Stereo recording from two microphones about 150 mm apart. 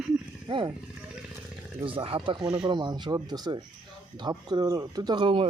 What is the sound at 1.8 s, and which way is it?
Speech, 35° right (ahead or behind).